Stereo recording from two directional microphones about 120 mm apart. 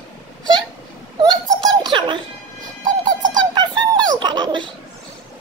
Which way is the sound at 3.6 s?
35° right (ahead or behind).